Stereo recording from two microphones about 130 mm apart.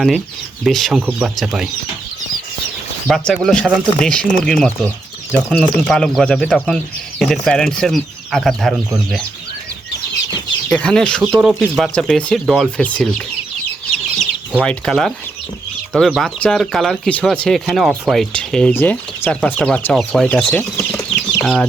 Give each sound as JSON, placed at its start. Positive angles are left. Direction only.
{"t": 0.6, "sound": "speech", "side_deg": 0}
{"t": 3.1, "sound": "speech", "side_deg": 5}
{"t": 10.7, "sound": "speech", "side_deg": 5}
{"t": 11.2, "sound": "speech", "side_deg": -10}
{"t": 14.6, "sound": "speech", "side_deg": 5}